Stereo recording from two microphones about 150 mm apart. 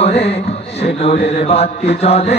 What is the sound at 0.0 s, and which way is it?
Music, 45° left (ahead or behind).